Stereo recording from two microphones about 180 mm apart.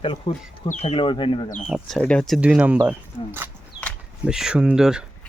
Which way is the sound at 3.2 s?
35° left (ahead or behind).